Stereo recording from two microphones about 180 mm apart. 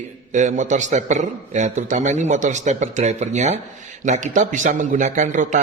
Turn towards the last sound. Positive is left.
turn(degrees=-45)  # may be behind; listen again after turning